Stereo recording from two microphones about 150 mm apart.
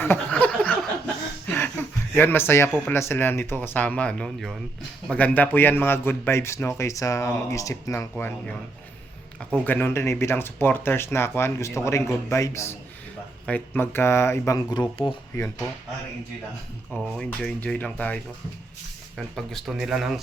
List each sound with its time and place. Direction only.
0.0 s a sound: 10° left (ahead or behind)
3.0 s a man's voice: 15° left (ahead or behind)
8.1 s a man's voice: 5° left (ahead or behind)
9.6 s a man's voice: 15° left (ahead or behind)
17.2 s a man's voice: 10° left (ahead or behind)